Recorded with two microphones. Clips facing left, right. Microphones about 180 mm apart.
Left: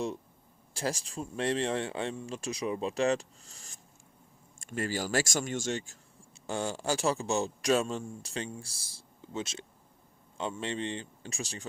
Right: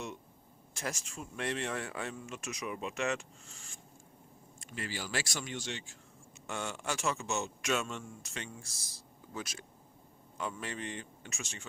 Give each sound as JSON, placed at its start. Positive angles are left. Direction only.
{"t": 0.7, "sound": "a man's voice", "side_deg": 30}
{"t": 6.5, "sound": "a man's voice", "side_deg": 30}